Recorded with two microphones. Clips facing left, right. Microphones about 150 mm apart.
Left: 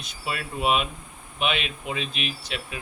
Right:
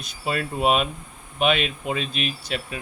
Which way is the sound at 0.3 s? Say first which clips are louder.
Right 4 dB; 40° right (ahead or behind).